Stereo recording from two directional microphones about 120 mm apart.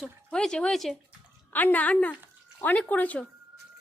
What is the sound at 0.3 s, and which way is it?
Speech, 5° left (ahead or behind).